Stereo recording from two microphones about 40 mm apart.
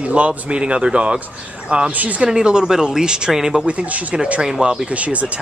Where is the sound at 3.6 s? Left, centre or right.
Right.